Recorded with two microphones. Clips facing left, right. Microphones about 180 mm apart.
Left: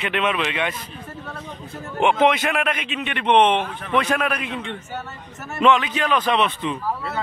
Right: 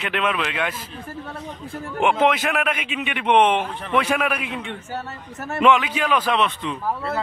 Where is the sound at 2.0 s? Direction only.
5° right (ahead or behind).